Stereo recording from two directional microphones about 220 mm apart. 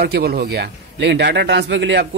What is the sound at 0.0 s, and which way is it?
Speech, 45° right (ahead or behind).